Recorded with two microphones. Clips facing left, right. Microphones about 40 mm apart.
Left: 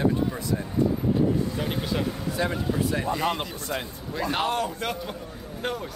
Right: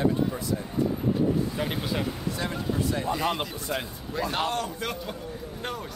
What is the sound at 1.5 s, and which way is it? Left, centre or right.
Speech, centre.